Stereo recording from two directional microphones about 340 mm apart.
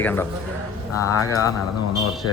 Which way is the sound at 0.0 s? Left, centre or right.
Centre.